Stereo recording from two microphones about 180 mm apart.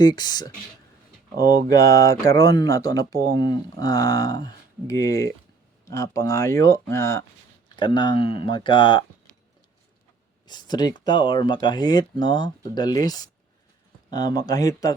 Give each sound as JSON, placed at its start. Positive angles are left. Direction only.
{"t": 0.0, "sound": "speech", "side_deg": 20}
{"t": 1.4, "sound": "speech", "side_deg": -60}
{"t": 1.7, "sound": "speech", "side_deg": 15}
{"t": 10.4, "sound": "speech", "side_deg": 25}